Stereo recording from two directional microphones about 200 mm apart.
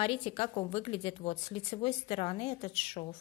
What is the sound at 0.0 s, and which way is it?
Speech, 25° left (ahead or behind).